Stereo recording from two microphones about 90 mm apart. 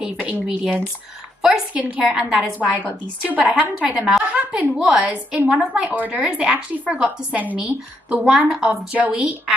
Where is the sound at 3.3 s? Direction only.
20° right (ahead or behind).